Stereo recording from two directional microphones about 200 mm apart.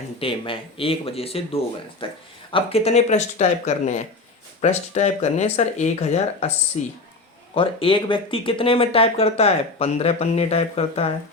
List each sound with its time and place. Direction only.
0.2 s speech: 25° left (ahead or behind)